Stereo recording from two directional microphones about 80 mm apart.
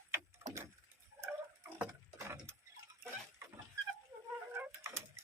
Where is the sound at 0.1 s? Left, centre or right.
Right.